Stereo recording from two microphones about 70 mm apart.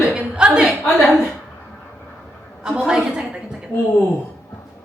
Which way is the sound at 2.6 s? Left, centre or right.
Centre.